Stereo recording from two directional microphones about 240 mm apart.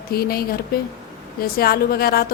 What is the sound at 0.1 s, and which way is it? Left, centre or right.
A woman's voice, left.